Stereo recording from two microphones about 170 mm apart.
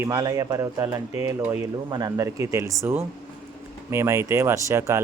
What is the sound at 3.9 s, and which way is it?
Speech, 15° right (ahead or behind).